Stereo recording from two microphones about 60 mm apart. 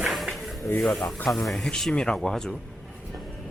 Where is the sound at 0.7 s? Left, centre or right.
Left.